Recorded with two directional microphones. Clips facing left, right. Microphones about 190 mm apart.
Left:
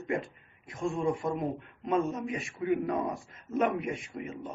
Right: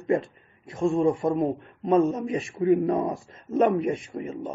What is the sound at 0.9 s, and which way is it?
Speech, 30° right (ahead or behind).